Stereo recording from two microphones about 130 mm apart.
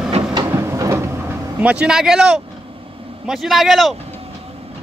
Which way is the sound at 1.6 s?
10° right (ahead or behind).